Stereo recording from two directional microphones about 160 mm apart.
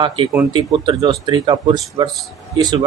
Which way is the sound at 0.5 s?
30° right (ahead or behind).